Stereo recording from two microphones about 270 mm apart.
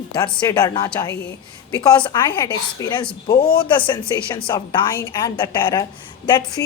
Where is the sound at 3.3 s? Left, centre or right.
Left.